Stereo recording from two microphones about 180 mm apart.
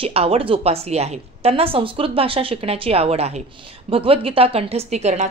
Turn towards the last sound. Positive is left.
turn(degrees=-40)  # may be behind; listen again after turning